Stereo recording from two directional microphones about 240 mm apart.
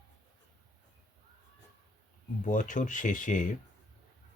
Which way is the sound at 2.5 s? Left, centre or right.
Left.